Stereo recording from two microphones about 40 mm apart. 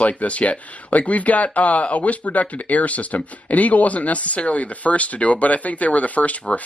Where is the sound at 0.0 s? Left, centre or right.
Left.